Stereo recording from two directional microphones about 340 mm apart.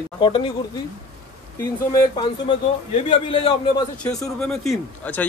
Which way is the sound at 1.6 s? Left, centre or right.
Centre.